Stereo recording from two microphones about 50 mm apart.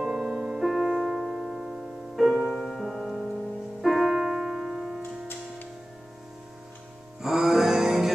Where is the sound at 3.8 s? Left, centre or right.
Centre.